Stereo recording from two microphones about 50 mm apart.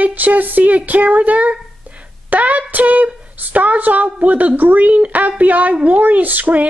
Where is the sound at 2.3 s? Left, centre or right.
Right.